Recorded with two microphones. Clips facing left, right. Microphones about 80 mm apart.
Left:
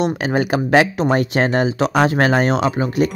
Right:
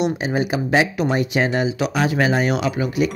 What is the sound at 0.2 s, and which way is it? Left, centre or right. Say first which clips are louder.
Speech: left 3 dB; left.